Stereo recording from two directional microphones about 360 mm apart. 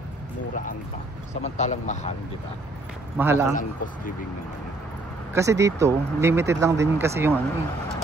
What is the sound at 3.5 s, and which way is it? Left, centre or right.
Speech, left.